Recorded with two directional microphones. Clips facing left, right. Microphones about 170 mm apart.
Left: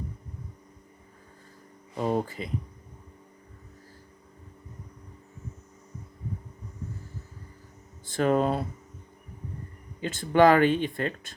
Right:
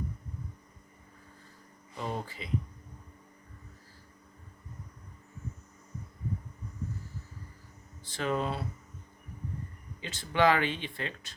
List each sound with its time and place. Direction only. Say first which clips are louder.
2.0 s speech: left 9 dB; 45° left (ahead or behind)
8.0 s speech: left 8 dB; 50° left (ahead or behind)
10.0 s speech: left 7 dB; 50° left (ahead or behind)